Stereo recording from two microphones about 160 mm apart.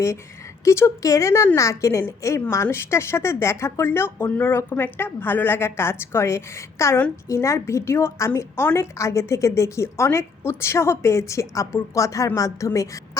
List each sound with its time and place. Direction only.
0.6 s a woman's voice: 15° left (ahead or behind)